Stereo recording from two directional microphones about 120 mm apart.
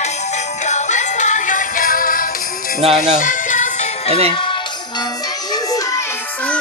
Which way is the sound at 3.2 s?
90° left.